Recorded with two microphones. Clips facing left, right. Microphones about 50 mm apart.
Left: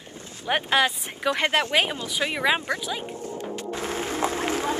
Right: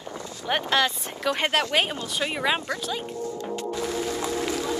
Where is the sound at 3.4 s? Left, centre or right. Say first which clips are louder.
Right 2 dB; left.